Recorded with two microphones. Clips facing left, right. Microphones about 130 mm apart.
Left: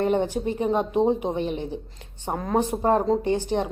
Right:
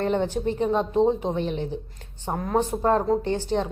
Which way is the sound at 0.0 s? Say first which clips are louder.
Left 1 dB; 10° left (ahead or behind).